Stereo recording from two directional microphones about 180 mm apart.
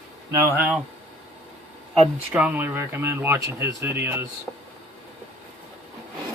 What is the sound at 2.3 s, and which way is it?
Speech, 10° right (ahead or behind).